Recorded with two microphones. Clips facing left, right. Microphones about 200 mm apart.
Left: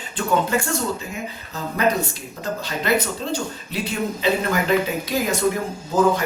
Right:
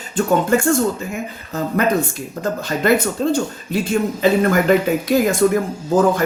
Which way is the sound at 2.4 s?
50° right (ahead or behind).